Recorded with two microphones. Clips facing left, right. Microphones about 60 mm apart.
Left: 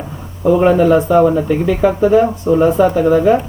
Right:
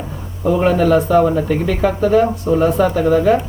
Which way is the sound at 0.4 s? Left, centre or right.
Centre.